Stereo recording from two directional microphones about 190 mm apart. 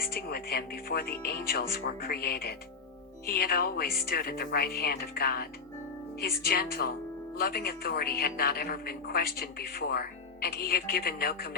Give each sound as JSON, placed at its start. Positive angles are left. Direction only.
{"t": 0.0, "sound": "speech", "side_deg": 55}